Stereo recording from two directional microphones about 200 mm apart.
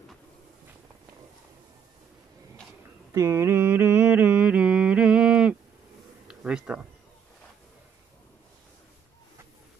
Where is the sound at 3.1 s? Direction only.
15° right (ahead or behind).